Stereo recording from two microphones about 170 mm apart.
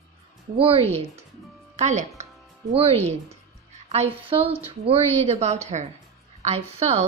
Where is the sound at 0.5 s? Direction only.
35° right (ahead or behind).